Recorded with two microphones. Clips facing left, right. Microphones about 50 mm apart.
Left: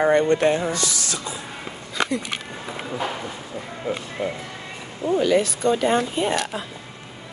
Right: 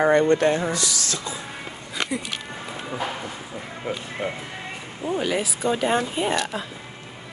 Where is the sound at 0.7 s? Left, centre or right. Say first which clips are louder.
Left 1 dB; left.